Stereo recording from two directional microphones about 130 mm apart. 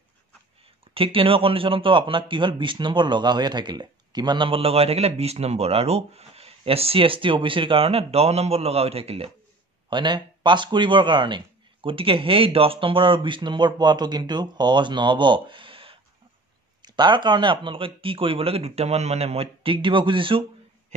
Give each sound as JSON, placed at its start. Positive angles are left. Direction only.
{"t": 0.9, "sound": "speech", "side_deg": -45}
{"t": 9.8, "sound": "speech", "side_deg": -35}